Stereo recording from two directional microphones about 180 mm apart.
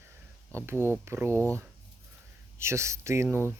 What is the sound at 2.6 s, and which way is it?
Speech, 15° right (ahead or behind).